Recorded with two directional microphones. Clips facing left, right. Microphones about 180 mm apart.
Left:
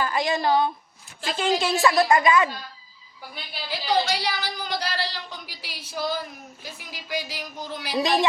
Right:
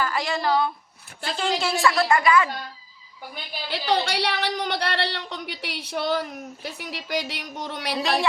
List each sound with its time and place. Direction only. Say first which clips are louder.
0.0 s a woman's voice: left 1 dB; 20° left (ahead or behind)
3.7 s a woman's voice: even; 65° right (ahead or behind)